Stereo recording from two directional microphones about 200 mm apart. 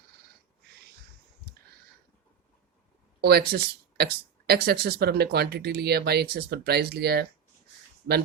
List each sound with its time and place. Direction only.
3.2 s speech: 50° right (ahead or behind)